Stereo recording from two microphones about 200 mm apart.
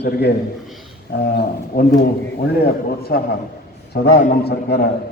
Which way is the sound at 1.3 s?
55° left (ahead or behind).